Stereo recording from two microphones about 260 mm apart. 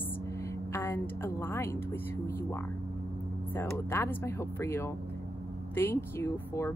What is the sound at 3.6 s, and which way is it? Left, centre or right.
Speech, centre.